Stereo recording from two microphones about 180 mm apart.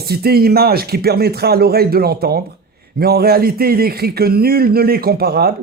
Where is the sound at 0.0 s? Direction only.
60° right (ahead or behind).